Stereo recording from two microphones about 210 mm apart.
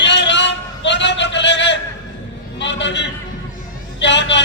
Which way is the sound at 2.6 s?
60° left (ahead or behind).